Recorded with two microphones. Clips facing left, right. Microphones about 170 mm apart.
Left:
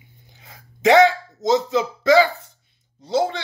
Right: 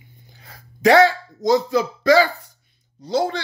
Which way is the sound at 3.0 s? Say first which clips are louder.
Even; 25° left (ahead or behind).